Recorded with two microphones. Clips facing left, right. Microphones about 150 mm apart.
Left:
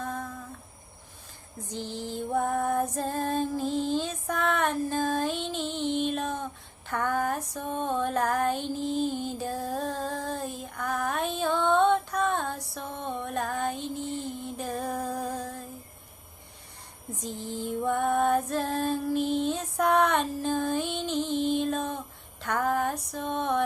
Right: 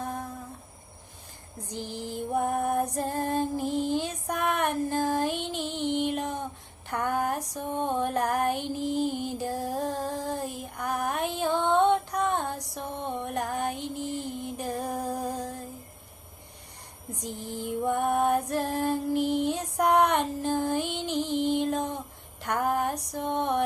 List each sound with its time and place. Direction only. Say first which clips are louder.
0.0 s humming: even; 15° right (ahead or behind)
1.9 s music: even; 15° right (ahead or behind)
6.1 s female singing: even; 15° right (ahead or behind)
8.8 s music: right 1 dB; 15° right (ahead or behind)
17.2 s music: left 1 dB; 15° right (ahead or behind)
21.7 s a sound: right 1 dB; 15° right (ahead or behind)